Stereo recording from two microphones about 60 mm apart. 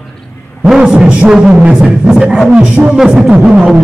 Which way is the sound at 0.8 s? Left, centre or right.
Centre.